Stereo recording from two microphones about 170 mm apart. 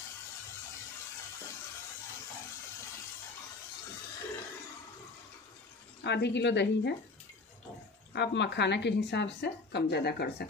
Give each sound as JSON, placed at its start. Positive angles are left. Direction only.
{"t": 6.0, "sound": "a woman's voice", "side_deg": 90}
{"t": 8.1, "sound": "a woman's voice", "side_deg": 90}